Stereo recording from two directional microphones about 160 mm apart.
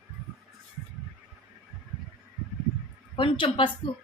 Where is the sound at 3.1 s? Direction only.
35° left (ahead or behind).